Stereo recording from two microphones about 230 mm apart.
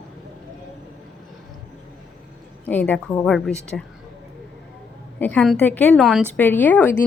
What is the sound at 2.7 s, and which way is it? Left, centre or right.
A woman's voice, centre.